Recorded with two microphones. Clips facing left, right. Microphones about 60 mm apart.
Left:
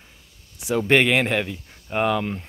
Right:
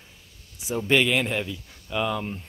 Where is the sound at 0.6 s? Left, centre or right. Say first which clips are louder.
Left 4 dB; left.